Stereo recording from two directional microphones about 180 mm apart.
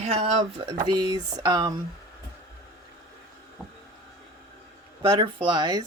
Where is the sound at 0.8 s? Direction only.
25° right (ahead or behind).